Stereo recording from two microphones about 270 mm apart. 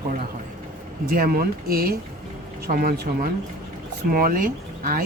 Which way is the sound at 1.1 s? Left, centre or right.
Right.